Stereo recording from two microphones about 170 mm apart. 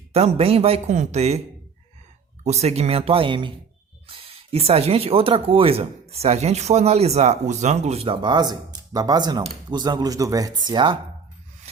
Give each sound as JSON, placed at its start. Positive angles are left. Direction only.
{"t": 0.1, "sound": "speech", "side_deg": -35}
{"t": 2.4, "sound": "speech", "side_deg": -40}